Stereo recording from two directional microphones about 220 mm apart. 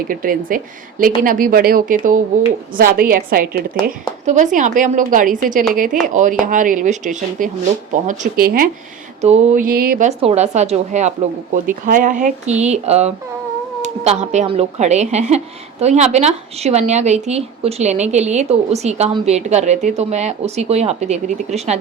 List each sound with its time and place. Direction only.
0.1 s speech: 40° right (ahead or behind)
10.1 s speech: 30° right (ahead or behind)